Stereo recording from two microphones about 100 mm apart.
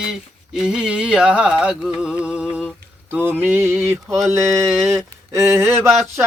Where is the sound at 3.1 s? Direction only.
20° right (ahead or behind).